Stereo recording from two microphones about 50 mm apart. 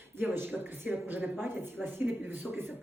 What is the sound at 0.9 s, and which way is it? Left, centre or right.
Speech, right.